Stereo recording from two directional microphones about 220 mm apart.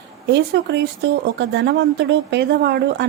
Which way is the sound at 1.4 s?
50° right (ahead or behind).